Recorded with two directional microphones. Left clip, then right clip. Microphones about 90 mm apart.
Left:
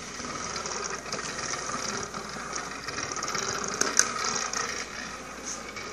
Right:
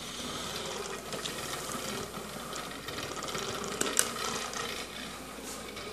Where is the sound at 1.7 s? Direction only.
25° right (ahead or behind).